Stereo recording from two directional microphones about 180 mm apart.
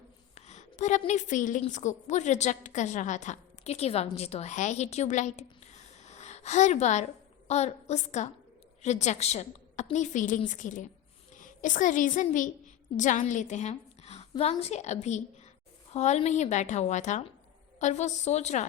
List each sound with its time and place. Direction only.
0.3 s a woman's voice: 40° left (ahead or behind)